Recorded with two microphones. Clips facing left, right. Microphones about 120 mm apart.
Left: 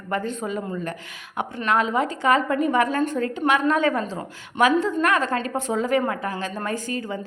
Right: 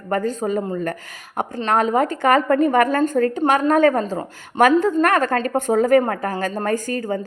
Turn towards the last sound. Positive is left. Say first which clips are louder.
# right 6 dB
turn(degrees=-45)  # may be behind; listen again after turning